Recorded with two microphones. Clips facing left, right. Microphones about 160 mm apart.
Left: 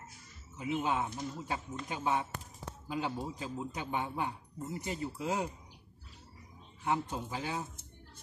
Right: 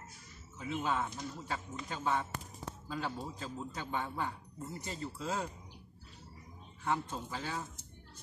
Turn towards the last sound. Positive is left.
turn(degrees=15)  # may be behind; listen again after turning